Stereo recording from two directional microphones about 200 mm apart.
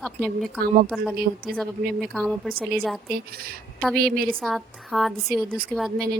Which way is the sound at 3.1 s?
50° right (ahead or behind).